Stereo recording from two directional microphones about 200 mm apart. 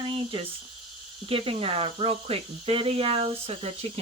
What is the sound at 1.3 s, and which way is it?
Speech, 30° right (ahead or behind).